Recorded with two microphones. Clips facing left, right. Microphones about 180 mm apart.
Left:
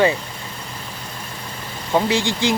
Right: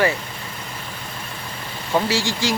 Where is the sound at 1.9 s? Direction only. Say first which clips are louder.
Left 2 dB; 15° left (ahead or behind).